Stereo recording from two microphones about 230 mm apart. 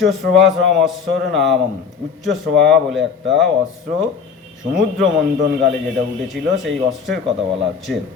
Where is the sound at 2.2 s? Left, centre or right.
Right.